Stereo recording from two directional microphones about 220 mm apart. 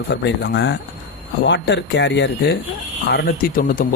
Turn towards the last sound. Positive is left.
turn(degrees=40)  # may be behind; listen again after turning